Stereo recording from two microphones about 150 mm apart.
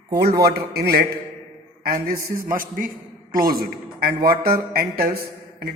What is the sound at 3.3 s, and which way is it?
Speech, 80° right.